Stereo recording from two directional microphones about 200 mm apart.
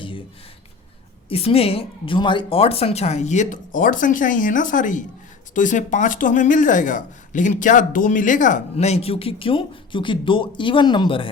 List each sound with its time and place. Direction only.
1.3 s speech: 30° left (ahead or behind)